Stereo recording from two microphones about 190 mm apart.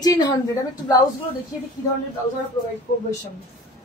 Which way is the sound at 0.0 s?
20° left (ahead or behind).